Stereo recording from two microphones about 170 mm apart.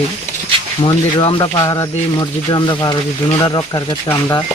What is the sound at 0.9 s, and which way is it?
Speech, 30° left (ahead or behind).